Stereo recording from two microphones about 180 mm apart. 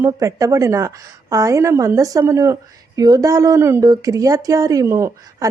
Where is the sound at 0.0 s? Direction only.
15° right (ahead or behind).